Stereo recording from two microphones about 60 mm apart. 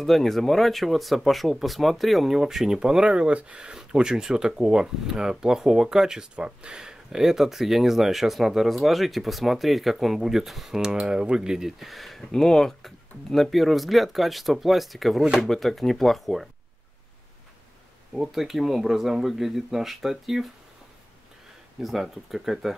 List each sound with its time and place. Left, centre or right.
0.0 s speech: centre
18.1 s speech: centre
21.7 s speech: centre